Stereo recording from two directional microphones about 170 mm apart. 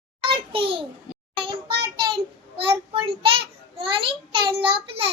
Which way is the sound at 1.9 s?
30° right (ahead or behind).